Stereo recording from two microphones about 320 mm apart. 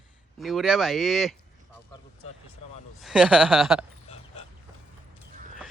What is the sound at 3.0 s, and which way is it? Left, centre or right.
Speech, centre.